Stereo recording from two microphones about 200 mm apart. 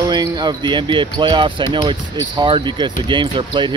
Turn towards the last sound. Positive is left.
turn(degrees=-25)  # may be behind; listen again after turning